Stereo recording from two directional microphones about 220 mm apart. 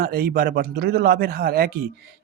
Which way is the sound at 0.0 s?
40° right (ahead or behind).